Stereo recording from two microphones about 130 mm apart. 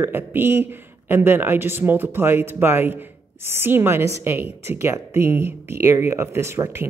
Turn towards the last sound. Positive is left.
turn(degrees=-20)  # may be behind; listen again after turning